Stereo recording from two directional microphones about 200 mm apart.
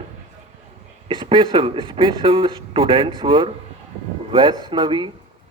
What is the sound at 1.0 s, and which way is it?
Speech, 25° right (ahead or behind).